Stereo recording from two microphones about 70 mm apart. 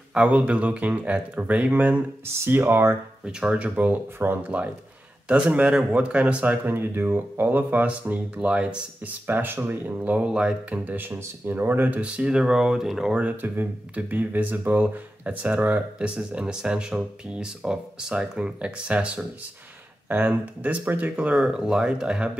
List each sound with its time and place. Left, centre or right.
0.1 s speech: centre
2.2 s speech: right
3.3 s speech: centre
9.2 s speech: right; by 13.1 s centre
13.1 s speech: right